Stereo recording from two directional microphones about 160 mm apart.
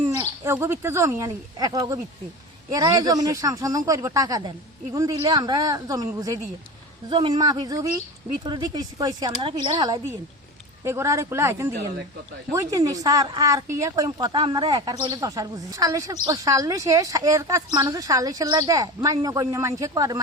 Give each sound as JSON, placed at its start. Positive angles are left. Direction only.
{"t": 0.2, "sound": "a woman's voice", "side_deg": -15}
{"t": 7.1, "sound": "a woman's voice", "side_deg": -30}